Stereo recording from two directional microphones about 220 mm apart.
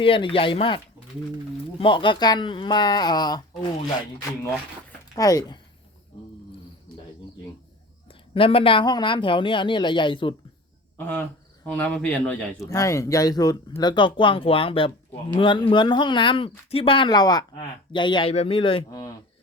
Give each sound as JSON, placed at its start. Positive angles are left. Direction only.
{"t": 0.0, "sound": "speech", "side_deg": 25}
{"t": 1.8, "sound": "speech", "side_deg": 20}
{"t": 5.1, "sound": "speech", "side_deg": 15}
{"t": 8.0, "sound": "speech", "side_deg": 25}
{"t": 10.9, "sound": "speech", "side_deg": 10}